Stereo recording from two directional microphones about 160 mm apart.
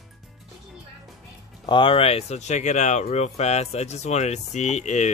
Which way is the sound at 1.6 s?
30° left (ahead or behind).